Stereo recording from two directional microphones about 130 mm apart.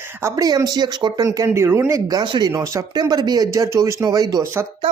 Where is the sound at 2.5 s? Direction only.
25° right (ahead or behind).